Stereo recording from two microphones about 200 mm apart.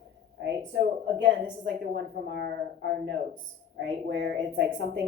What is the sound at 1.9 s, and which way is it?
A woman's voice, 50° right (ahead or behind).